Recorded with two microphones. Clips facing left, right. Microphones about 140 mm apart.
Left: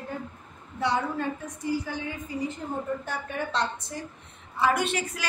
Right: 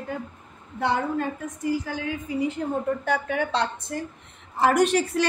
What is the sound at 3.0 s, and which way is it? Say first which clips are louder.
Speech: right 7 dB; 70° right (ahead or behind).